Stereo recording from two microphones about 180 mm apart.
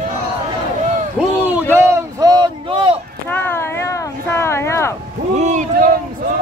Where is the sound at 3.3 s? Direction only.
15° left (ahead or behind).